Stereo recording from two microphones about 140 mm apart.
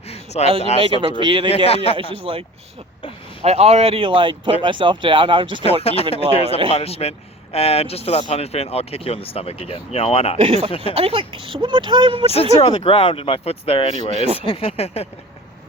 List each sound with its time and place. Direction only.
0.4 s speech: 50° left (ahead or behind)
0.8 s speech: 35° right (ahead or behind)
1.5 s speech: 45° left (ahead or behind)
2.0 s speech: 40° right (ahead or behind)
3.4 s speech: 50° right (ahead or behind)
5.8 s speech: 45° left (ahead or behind)
10.3 s speech: 45° right (ahead or behind)
10.7 s speech: 40° left (ahead or behind)
10.9 s speech: 40° right (ahead or behind)
12.2 s speech: 45° left (ahead or behind)